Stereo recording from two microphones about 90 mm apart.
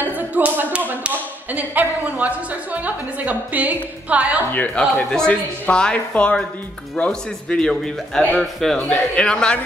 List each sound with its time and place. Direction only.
0.0 s speech: 20° right (ahead or behind)
4.5 s a man's voice: 15° left (ahead or behind)